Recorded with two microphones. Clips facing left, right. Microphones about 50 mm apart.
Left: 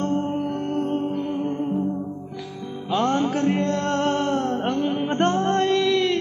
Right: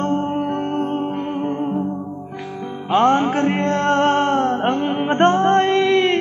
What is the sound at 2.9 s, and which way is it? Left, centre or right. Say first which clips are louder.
Music: right 6 dB; right.